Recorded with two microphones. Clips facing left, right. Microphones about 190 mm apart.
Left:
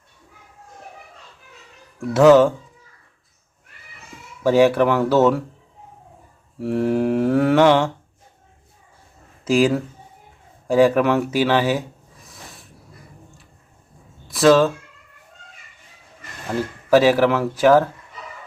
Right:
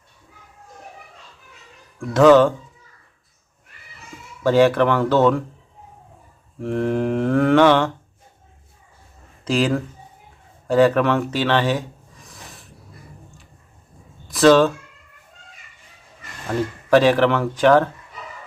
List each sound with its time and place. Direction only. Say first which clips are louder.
2.0 s mantra: even; 10° left (ahead or behind)
4.4 s mantra: even; 10° left (ahead or behind)
6.6 s mantra: left 2 dB; 5° left (ahead or behind)
9.4 s speech: left 3 dB; 10° left (ahead or behind)
14.3 s speech: right 1 dB; centre (ahead or behind)
16.9 s speech: even; 5° left (ahead or behind)